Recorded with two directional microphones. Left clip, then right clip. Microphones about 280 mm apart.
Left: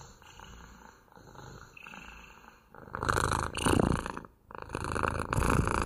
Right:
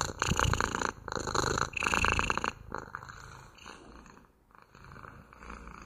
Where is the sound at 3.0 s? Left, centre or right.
Left.